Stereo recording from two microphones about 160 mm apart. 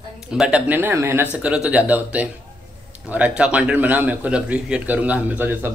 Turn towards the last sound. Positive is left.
turn(degrees=-10)  # may be behind; listen again after turning